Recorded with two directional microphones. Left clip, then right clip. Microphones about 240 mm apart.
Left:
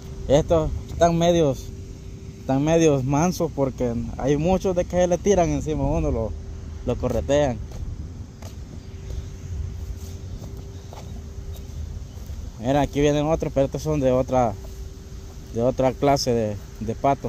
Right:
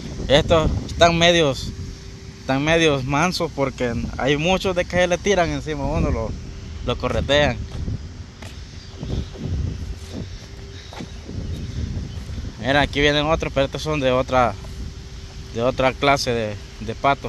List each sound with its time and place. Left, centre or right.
0.3 s speech: centre
3.4 s speech: centre
5.6 s speech: centre
7.1 s speech: centre
12.6 s speech: centre
15.5 s speech: centre